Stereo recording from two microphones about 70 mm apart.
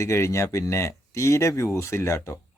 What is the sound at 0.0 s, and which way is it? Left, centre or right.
Speech, left.